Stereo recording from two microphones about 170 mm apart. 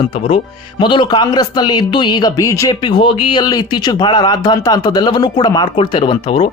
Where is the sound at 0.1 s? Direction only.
30° left (ahead or behind).